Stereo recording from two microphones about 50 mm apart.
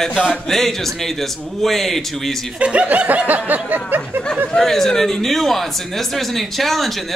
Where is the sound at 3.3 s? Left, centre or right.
Right.